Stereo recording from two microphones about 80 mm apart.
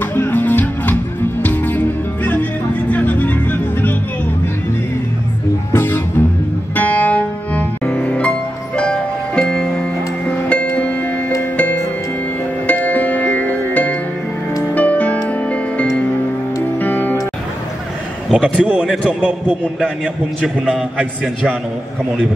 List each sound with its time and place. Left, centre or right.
0.1 s music: left
5.7 s music: left
12.6 s music: centre
18.6 s a man's voice: centre